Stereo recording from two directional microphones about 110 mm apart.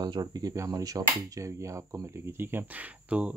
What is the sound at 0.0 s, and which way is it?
Speech, 40° right (ahead or behind).